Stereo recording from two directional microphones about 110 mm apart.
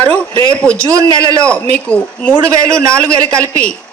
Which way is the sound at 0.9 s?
30° right (ahead or behind).